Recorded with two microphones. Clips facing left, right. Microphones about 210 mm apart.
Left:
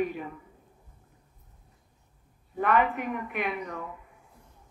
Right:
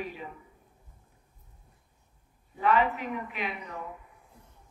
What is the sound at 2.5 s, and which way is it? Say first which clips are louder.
A woman's voice: left 1 dB; 55° left (ahead or behind).